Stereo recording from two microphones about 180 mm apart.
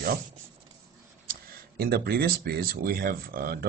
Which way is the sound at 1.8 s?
60° right (ahead or behind).